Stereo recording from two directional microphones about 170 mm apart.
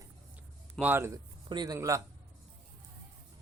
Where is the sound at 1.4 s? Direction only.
25° right (ahead or behind).